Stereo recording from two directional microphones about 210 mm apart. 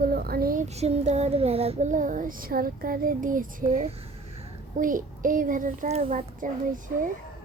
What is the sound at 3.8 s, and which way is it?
A child's voice, 30° right (ahead or behind).